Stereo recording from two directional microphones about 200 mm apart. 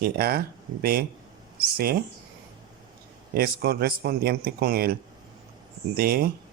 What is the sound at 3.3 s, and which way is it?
Speech, 50° right (ahead or behind).